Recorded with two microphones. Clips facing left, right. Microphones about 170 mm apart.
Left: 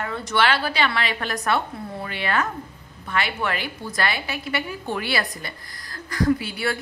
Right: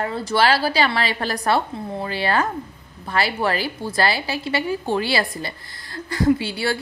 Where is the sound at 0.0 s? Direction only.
30° right (ahead or behind).